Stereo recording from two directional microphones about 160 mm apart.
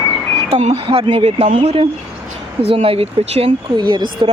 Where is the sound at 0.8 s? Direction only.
35° right (ahead or behind).